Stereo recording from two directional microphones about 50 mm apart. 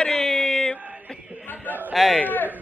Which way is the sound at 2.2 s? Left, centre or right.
Left.